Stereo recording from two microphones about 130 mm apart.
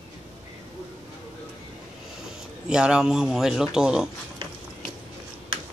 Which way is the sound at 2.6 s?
5° right (ahead or behind).